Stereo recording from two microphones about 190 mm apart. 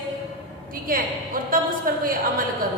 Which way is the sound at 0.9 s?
50° right (ahead or behind).